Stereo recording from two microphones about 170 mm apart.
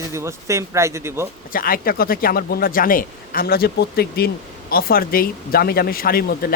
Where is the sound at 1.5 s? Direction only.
60° left (ahead or behind).